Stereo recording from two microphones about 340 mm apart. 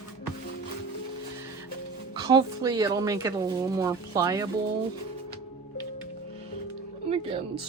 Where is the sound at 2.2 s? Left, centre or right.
Centre.